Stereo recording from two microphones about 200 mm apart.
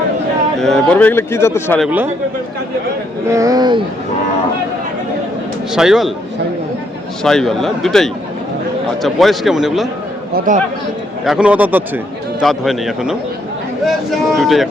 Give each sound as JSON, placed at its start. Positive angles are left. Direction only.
{"t": 0.6, "sound": "a man's voice", "side_deg": 5}
{"t": 1.8, "sound": "speech", "side_deg": -5}
{"t": 3.2, "sound": "speech", "side_deg": -15}
{"t": 5.7, "sound": "a man's voice", "side_deg": 0}
{"t": 7.2, "sound": "a man's voice", "side_deg": 0}
{"t": 10.3, "sound": "a man's voice", "side_deg": -40}
{"t": 11.3, "sound": "a man's voice", "side_deg": -5}